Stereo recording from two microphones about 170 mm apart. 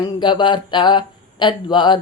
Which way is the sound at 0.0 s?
25° left (ahead or behind).